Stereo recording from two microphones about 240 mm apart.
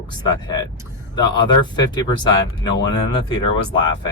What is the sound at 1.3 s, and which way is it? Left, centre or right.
Speech, centre.